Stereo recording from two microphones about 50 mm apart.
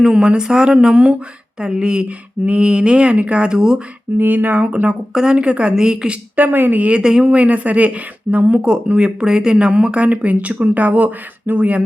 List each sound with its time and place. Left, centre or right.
0.0 s speech: centre
4.2 s speech: right
4.5 s speech: right
6.3 s speech: right
7.0 s speech: centre
7.3 s speech: right